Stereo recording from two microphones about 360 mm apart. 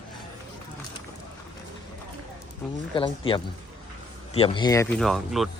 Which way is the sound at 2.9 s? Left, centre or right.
Centre.